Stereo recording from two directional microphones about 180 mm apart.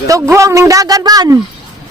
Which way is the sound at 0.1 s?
15° right (ahead or behind).